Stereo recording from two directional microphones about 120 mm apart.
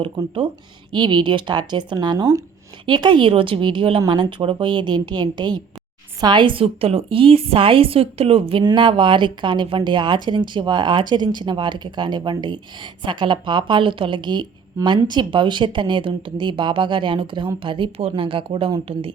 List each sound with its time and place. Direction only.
0.9 s a woman's voice: 40° right (ahead or behind)